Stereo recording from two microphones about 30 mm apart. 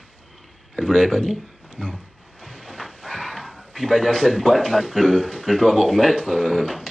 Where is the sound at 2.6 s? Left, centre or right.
Centre.